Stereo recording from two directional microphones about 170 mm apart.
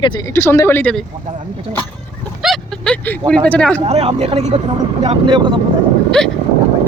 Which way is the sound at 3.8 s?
35° right (ahead or behind).